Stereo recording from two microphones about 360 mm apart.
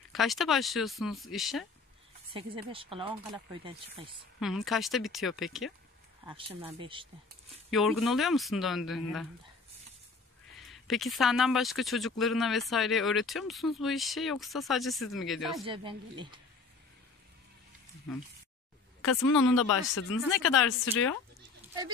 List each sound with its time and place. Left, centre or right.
0.1 s speech: centre
2.3 s speech: centre
4.4 s speech: centre
6.2 s speech: centre
7.7 s speech: centre
10.7 s speech: centre
15.6 s speech: centre
18.9 s speech: centre
20.0 s speech: left